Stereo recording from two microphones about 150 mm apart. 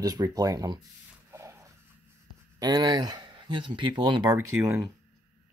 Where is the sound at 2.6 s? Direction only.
25° right (ahead or behind).